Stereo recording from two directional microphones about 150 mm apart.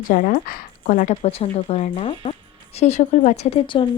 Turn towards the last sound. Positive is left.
turn(degrees=35)  # may be behind; listen again after turning